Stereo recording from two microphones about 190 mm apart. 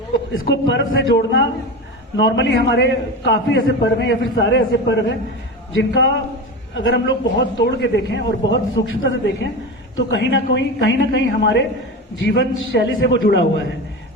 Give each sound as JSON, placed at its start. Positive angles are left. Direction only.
{"t": 0.3, "sound": "a man's voice", "side_deg": 70}
{"t": 12.7, "sound": "a man's voice", "side_deg": 65}